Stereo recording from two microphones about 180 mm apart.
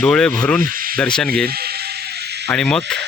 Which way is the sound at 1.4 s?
60° right (ahead or behind).